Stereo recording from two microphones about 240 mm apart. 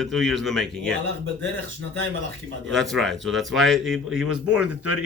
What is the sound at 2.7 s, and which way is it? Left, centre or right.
Speech, centre.